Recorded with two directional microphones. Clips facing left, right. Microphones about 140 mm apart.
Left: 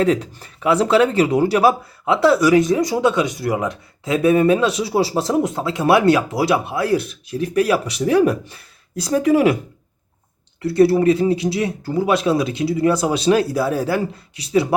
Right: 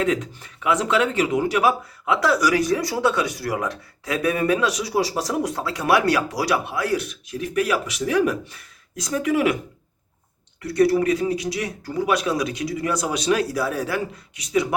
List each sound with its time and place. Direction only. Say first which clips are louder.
0.0 s speech: left 5 dB; 35° left (ahead or behind)
10.6 s speech: left 4 dB; 30° left (ahead or behind)